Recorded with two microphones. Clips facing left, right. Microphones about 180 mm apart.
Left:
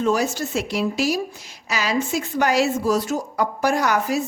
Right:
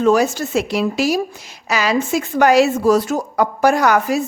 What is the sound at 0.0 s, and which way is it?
A woman's voice, 70° right (ahead or behind).